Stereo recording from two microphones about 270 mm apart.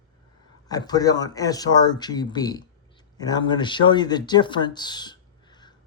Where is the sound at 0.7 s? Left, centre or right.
Centre.